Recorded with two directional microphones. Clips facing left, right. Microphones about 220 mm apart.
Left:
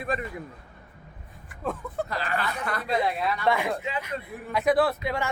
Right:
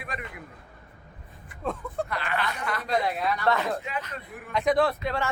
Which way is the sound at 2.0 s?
40° left (ahead or behind).